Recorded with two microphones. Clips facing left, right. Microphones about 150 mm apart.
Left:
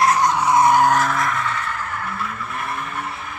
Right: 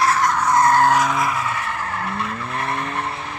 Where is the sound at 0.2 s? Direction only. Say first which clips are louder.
Left 1 dB; 20° left (ahead or behind).